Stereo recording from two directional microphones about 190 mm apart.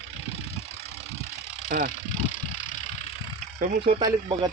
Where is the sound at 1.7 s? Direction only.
55° right (ahead or behind).